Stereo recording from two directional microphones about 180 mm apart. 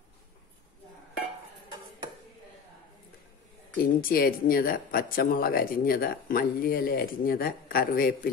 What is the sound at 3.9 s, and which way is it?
Speech, 55° left (ahead or behind).